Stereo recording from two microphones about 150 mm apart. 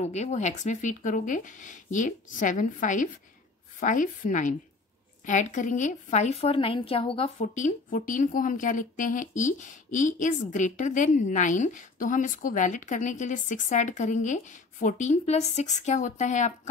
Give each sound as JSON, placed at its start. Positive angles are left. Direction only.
{"t": 0.0, "sound": "a woman's voice", "side_deg": 50}
{"t": 7.5, "sound": "speech", "side_deg": 60}